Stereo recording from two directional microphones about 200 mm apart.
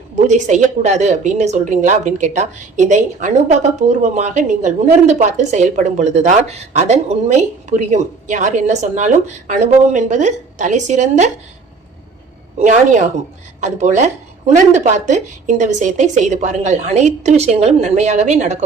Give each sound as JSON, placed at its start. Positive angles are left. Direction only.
{"t": 0.3, "sound": "a woman's voice", "side_deg": -40}
{"t": 12.5, "sound": "a woman's voice", "side_deg": -35}